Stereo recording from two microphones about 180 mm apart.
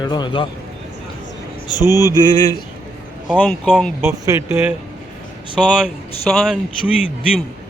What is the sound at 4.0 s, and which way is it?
Speech, 15° right (ahead or behind).